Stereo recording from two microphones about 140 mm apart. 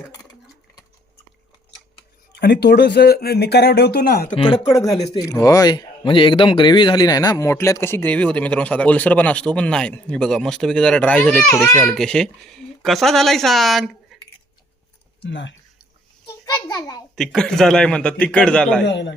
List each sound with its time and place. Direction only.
3.1 s speech: 90° left
4.4 s speech: 40° left (ahead or behind)
4.7 s a child's voice: 25° left (ahead or behind); by 14.2 s centre (ahead or behind)
16.5 s a child's voice: 25° left (ahead or behind)
17.2 s speech: 5° left (ahead or behind)